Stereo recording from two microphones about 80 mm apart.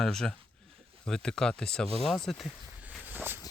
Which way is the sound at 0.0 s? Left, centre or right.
Centre.